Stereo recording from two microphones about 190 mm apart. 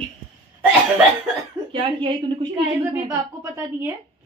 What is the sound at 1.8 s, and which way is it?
A woman's voice, 25° right (ahead or behind).